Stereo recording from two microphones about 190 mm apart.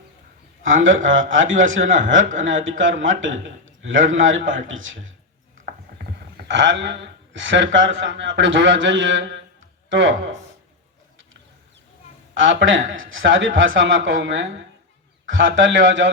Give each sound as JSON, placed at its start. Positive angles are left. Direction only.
{"t": 0.6, "sound": "a man's voice", "side_deg": -90}
{"t": 6.3, "sound": "speech", "side_deg": -70}
{"t": 12.4, "sound": "a man's voice", "side_deg": -85}